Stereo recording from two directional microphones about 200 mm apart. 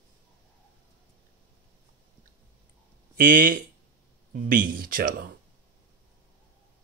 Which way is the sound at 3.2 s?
45° right (ahead or behind).